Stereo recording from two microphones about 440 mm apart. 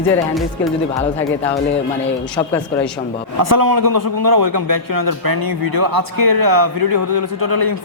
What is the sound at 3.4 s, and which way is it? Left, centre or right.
A man's voice, right.